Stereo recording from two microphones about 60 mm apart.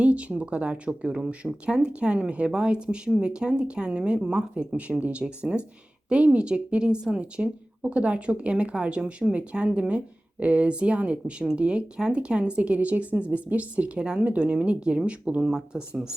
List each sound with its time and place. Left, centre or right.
0.0 s speech: right